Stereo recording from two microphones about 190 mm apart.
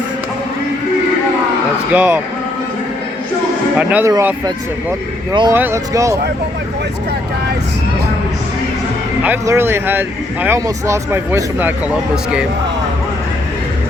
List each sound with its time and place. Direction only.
1.9 s speech: 10° right (ahead or behind)
3.8 s speech: 10° right (ahead or behind); by 5.5 s 25° right (ahead or behind)
5.5 s speech: 15° right (ahead or behind)
9.2 s speech: 10° right (ahead or behind)